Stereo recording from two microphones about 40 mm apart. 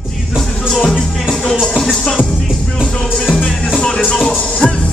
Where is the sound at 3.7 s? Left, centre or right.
Left.